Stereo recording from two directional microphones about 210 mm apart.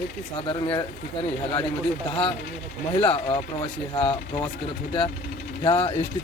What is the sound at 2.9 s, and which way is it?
Speech, 25° left (ahead or behind).